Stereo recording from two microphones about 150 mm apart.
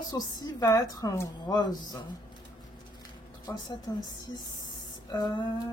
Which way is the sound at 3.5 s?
25° left (ahead or behind).